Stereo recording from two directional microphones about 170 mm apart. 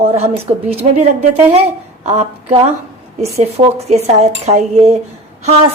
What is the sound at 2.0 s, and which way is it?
Speech, 40° right (ahead or behind).